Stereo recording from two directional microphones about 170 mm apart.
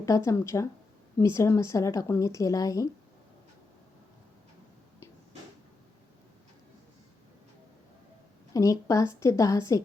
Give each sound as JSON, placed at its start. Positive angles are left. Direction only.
{"t": 0.0, "sound": "a woman's voice", "side_deg": 20}
{"t": 8.5, "sound": "a woman's voice", "side_deg": 20}